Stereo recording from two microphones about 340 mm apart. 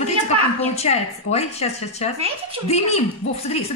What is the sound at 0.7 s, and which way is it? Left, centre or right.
A woman's voice, centre.